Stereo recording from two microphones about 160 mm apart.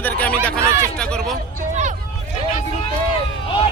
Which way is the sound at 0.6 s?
15° right (ahead or behind).